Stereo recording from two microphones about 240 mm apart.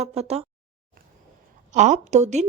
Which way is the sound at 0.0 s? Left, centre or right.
Right.